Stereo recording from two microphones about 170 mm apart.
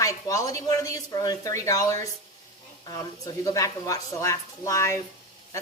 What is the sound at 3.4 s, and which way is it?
A woman's voice, 20° left (ahead or behind).